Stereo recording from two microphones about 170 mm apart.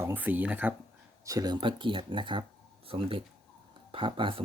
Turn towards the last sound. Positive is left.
turn(degrees=-30)  # may be behind; listen again after turning